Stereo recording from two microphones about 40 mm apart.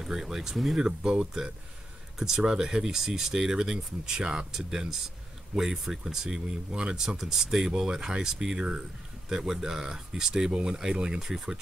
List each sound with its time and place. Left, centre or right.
0.0 s speech: centre